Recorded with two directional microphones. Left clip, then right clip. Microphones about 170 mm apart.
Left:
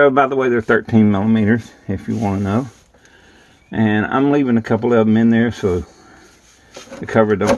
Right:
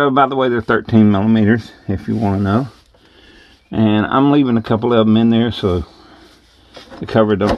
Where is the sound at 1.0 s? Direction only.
30° right (ahead or behind).